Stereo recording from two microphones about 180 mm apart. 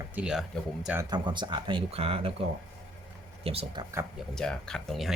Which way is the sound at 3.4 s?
30° right (ahead or behind).